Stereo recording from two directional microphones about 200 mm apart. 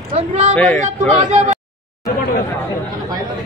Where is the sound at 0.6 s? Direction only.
5° left (ahead or behind).